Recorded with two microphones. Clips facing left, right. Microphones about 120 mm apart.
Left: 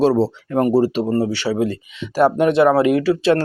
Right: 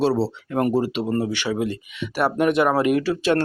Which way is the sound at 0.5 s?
35° left (ahead or behind).